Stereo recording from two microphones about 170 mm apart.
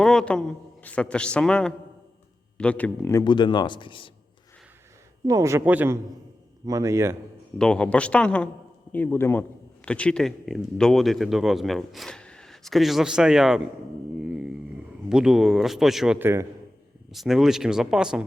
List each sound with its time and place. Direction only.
0.0 s speech: 5° left (ahead or behind)
3.2 s speech: 25° left (ahead or behind)
5.2 s speech: 20° right (ahead or behind)
7.6 s speech: 5° left (ahead or behind)
14.2 s a sound: 5° right (ahead or behind)
15.1 s speech: 5° right (ahead or behind)
17.1 s speech: centre (ahead or behind)